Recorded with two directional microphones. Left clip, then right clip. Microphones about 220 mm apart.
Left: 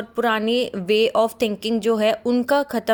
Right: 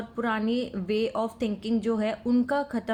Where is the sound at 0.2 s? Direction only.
40° left (ahead or behind).